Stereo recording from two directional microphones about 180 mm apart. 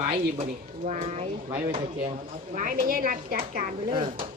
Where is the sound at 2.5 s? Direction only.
45° right (ahead or behind).